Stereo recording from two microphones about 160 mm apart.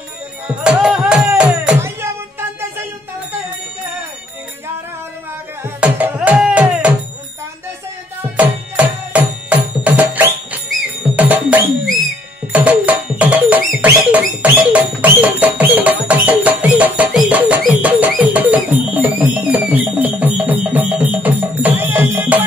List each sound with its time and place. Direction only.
0.7 s music: 5° right (ahead or behind)
5.6 s music: 10° right (ahead or behind)
8.4 s music: 10° right (ahead or behind)